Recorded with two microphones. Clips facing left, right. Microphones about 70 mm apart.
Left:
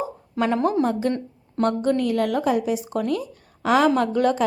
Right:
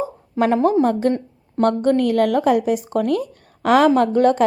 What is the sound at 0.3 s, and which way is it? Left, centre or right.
A woman's voice, right.